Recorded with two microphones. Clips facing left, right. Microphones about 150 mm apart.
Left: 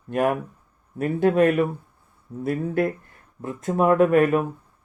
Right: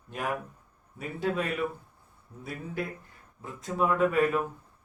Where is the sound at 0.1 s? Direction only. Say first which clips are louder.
Left 11 dB; 60° left (ahead or behind).